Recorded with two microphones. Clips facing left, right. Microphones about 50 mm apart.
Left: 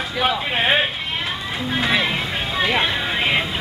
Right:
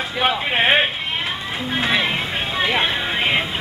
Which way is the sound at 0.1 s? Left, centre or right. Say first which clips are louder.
Right 1 dB; centre.